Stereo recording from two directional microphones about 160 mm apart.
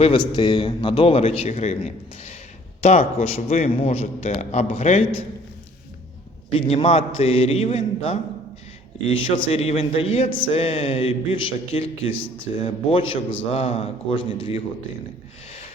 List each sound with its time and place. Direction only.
0.0 s a man's voice: 30° left (ahead or behind)
6.8 s a man's voice: 40° left (ahead or behind)